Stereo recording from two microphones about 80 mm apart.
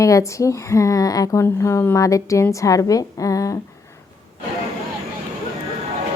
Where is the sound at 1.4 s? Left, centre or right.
Left.